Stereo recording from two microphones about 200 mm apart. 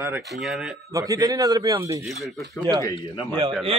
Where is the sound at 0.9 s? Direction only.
15° right (ahead or behind).